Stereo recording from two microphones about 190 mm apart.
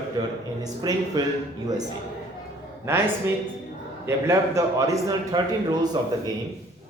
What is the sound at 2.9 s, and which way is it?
A man's voice, 15° right (ahead or behind).